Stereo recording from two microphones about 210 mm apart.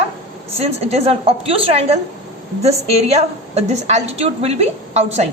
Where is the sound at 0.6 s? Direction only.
30° right (ahead or behind).